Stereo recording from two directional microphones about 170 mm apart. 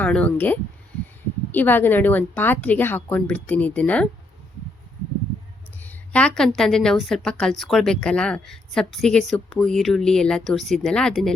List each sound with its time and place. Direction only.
0.0 s speech: 5° left (ahead or behind)
5.8 s a woman's voice: 10° left (ahead or behind)